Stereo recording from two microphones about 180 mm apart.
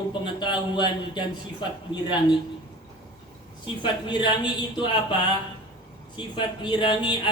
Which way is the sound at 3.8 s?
25° left (ahead or behind).